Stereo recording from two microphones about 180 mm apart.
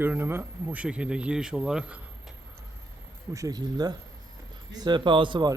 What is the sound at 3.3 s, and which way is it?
A man's voice, 20° right (ahead or behind).